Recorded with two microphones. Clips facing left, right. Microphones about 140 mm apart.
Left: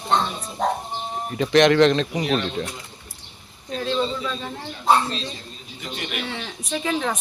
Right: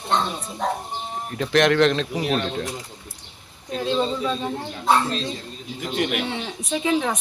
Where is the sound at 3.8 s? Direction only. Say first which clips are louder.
Right 1 dB; 15° right (ahead or behind).